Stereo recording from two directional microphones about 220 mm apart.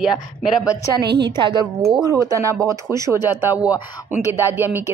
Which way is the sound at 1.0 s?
50° right (ahead or behind).